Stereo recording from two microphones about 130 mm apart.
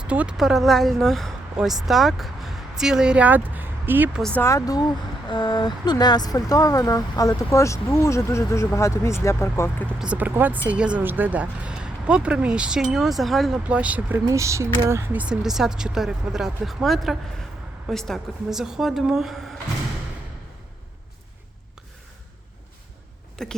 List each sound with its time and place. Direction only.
0.1 s speech: 10° right (ahead or behind)
4.4 s speech: 25° left (ahead or behind)
10.0 s speech: 10° right (ahead or behind)
14.3 s speech: 25° right (ahead or behind); by 19.5 s centre (ahead or behind)
23.4 s speech: 5° left (ahead or behind)